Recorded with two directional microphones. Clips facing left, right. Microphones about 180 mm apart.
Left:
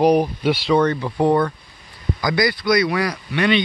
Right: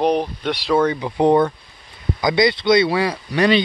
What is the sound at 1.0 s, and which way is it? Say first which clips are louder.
Speech: right 2 dB; 20° right (ahead or behind).